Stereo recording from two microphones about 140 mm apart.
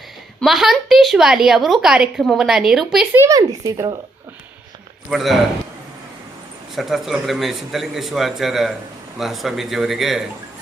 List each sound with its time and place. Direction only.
0.3 s a woman's voice: centre (ahead or behind)
3.2 s speech: 25° right (ahead or behind)
5.0 s a woman's voice: centre (ahead or behind)
6.7 s a woman's voice: centre (ahead or behind)